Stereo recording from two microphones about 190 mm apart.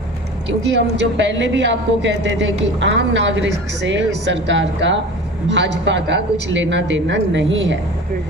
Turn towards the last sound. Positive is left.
turn(degrees=-75)  # may be behind; listen again after turning